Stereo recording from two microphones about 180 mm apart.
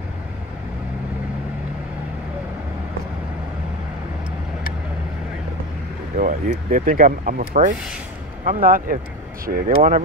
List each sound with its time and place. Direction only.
6.1 s speech: 45° right (ahead or behind)